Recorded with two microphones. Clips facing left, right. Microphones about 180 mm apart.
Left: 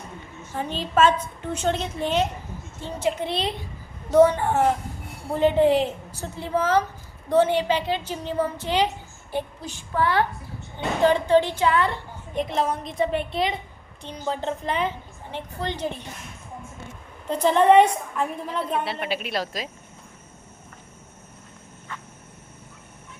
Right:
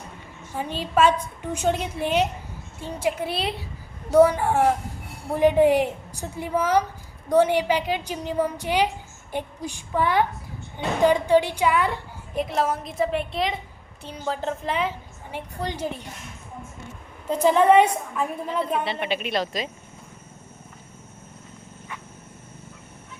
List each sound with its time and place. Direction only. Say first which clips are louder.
0.5 s a woman's voice: even; 10° right (ahead or behind)
17.2 s a woman's voice: even; 5° right (ahead or behind)
18.9 s a woman's voice: right 2 dB; 5° left (ahead or behind)